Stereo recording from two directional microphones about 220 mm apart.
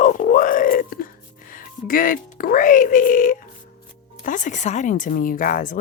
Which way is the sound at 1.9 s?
40° left (ahead or behind).